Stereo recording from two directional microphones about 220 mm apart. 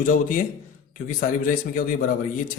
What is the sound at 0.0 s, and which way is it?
Speech, 35° left (ahead or behind).